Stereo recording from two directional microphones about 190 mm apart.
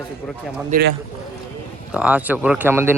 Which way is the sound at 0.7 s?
55° right (ahead or behind).